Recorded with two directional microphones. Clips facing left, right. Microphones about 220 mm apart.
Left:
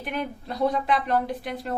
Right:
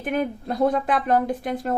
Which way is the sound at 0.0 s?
50° right (ahead or behind).